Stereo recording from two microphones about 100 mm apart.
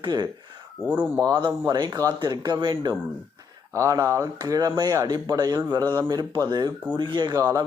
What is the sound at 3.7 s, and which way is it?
Speech, 30° right (ahead or behind).